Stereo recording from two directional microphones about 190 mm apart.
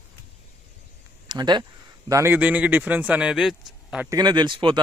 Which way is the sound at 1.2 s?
25° right (ahead or behind).